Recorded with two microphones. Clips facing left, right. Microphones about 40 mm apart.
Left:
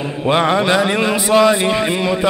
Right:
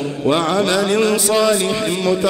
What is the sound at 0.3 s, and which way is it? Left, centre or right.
Speech, left.